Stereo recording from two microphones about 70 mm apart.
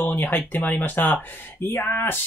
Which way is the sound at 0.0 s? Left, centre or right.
Left.